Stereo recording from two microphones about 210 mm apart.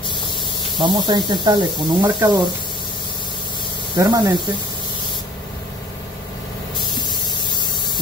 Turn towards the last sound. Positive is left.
turn(degrees=20)  # may be behind; listen again after turning